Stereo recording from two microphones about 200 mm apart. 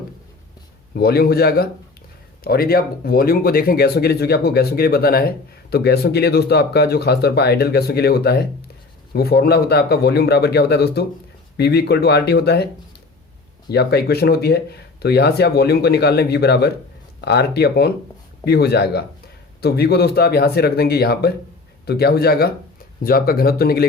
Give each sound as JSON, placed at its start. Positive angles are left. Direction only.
{"t": 0.9, "sound": "speech", "side_deg": 50}
{"t": 13.7, "sound": "speech", "side_deg": 55}